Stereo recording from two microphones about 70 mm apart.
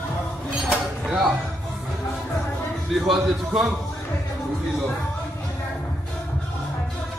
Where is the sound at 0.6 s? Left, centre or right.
Centre.